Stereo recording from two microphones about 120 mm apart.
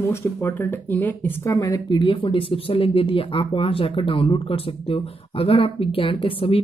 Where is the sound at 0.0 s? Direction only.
20° left (ahead or behind).